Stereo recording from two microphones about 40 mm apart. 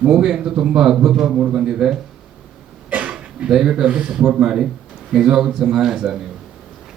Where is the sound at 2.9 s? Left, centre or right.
Right.